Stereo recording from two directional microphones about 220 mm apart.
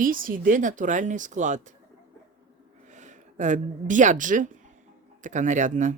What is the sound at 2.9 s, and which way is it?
A woman's voice, 35° right (ahead or behind).